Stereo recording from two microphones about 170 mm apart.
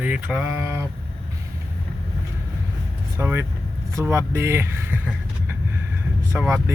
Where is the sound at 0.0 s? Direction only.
10° right (ahead or behind).